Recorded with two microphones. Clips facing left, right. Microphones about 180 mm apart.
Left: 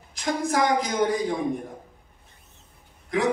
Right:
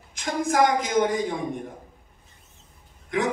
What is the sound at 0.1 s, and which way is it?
A man's voice, 35° left (ahead or behind).